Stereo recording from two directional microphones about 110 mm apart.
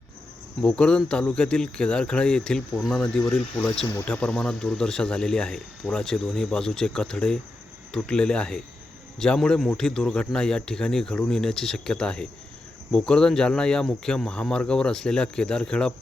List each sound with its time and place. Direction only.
0.6 s speech: 10° left (ahead or behind)